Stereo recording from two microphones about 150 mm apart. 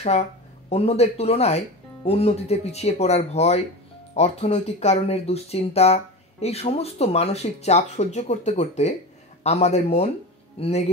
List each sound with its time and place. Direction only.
0.7 s speech: 45° left (ahead or behind)